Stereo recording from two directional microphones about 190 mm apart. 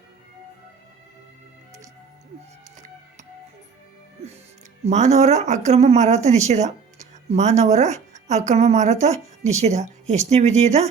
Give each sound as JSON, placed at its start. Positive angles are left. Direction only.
{"t": 4.9, "sound": "a woman's voice", "side_deg": -35}